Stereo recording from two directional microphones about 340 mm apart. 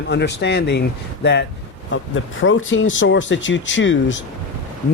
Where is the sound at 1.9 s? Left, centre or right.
Left.